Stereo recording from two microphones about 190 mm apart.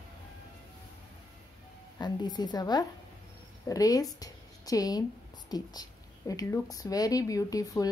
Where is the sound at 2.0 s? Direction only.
20° left (ahead or behind).